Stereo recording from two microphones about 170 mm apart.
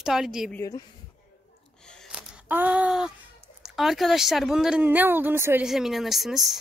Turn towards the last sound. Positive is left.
turn(degrees=0)  # may be behind; listen again after turning